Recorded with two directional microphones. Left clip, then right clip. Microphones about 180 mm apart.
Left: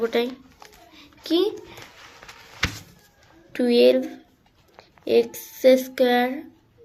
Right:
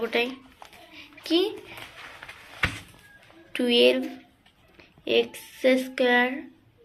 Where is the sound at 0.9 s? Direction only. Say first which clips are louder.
Left 2 dB; 55° left (ahead or behind).